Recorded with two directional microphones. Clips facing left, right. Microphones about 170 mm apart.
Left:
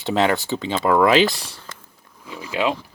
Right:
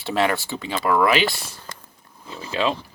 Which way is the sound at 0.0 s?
20° left (ahead or behind).